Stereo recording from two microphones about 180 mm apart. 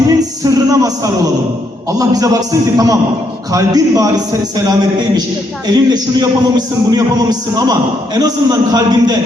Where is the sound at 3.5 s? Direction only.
20° right (ahead or behind).